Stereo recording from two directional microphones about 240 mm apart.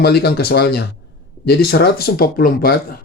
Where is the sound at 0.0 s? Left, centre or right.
Left.